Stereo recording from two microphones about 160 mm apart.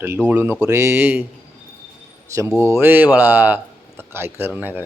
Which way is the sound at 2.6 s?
15° right (ahead or behind).